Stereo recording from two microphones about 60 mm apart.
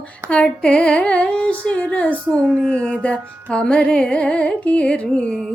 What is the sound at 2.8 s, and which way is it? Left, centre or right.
Carnatic music, centre.